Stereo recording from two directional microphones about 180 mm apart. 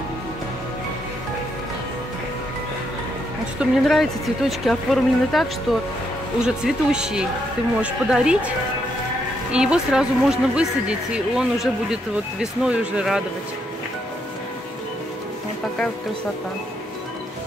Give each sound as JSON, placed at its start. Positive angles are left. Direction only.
{"t": 3.5, "sound": "speech", "side_deg": 0}
{"t": 9.5, "sound": "speech", "side_deg": -5}